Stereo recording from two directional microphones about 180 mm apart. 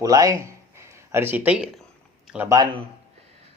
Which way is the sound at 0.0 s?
20° right (ahead or behind).